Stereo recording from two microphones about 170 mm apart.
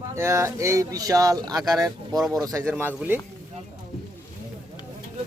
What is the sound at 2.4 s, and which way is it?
Speech, 20° right (ahead or behind).